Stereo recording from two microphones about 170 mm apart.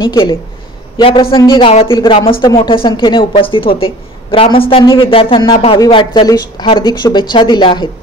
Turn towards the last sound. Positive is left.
turn(degrees=25)  # may be behind; listen again after turning